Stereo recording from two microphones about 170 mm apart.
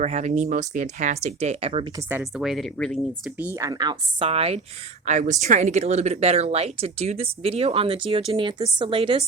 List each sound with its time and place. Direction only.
0.0 s speech: 45° right (ahead or behind)
2.4 s speech: centre (ahead or behind)
3.3 s speech: 15° right (ahead or behind); by 9.2 s 30° right (ahead or behind)